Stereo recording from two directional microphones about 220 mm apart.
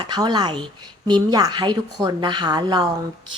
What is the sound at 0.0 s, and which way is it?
A woman's voice, 20° right (ahead or behind).